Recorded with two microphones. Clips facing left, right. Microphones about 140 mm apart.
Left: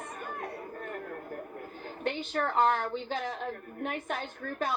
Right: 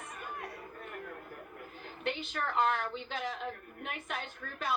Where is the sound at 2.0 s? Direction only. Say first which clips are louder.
Left 5 dB; 40° left (ahead or behind).